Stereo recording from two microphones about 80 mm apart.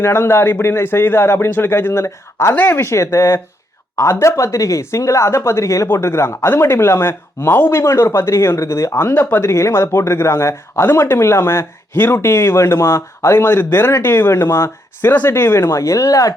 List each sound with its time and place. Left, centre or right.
0.0 s speech: left